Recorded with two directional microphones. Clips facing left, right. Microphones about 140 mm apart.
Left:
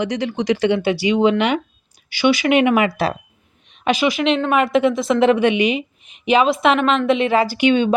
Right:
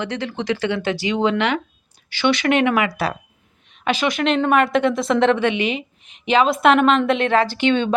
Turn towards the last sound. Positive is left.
turn(degrees=10)  # may be behind; listen again after turning